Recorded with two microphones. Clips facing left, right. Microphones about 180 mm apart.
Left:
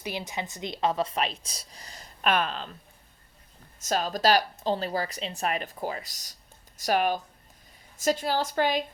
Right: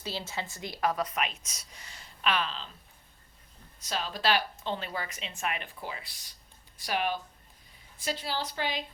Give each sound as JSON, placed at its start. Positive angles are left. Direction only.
{"t": 0.0, "sound": "a woman's voice", "side_deg": 15}
{"t": 3.8, "sound": "a woman's voice", "side_deg": 45}